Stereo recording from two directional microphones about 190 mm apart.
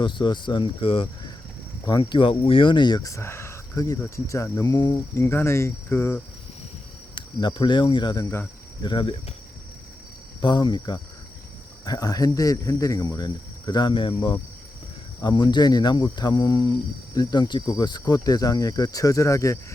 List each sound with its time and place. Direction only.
0.0 s speech: 25° left (ahead or behind)
7.2 s speech: 25° left (ahead or behind)
8.9 s speech: 25° left (ahead or behind)
10.4 s speech: 25° left (ahead or behind)